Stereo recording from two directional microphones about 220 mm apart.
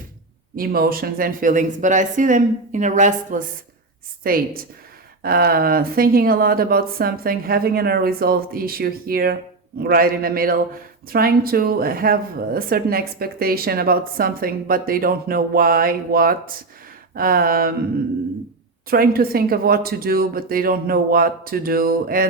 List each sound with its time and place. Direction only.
0.5 s speech: 45° right (ahead or behind)
18.9 s speech: 40° right (ahead or behind)